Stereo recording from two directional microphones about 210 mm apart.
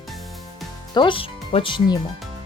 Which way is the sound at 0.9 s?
25° left (ahead or behind).